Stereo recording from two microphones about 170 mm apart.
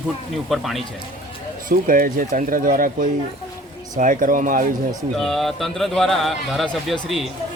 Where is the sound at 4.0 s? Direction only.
55° right (ahead or behind).